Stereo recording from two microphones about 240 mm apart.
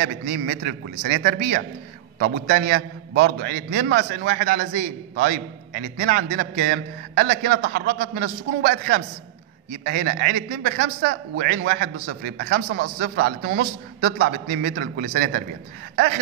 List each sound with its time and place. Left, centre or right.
0.0 s a man's voice: right